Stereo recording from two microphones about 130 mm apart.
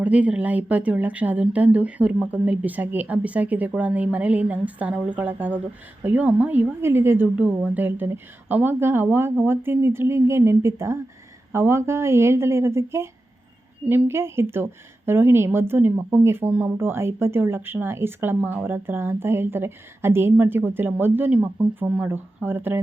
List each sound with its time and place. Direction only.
0.0 s a woman's voice: 10° right (ahead or behind)